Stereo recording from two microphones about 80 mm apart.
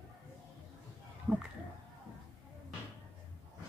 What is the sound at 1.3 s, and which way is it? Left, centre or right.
Speech, centre.